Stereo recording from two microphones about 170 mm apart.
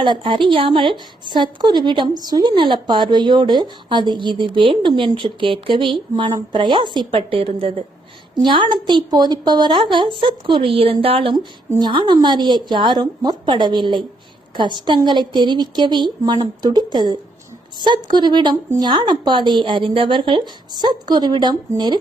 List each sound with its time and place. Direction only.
0.0 s speech: 30° right (ahead or behind)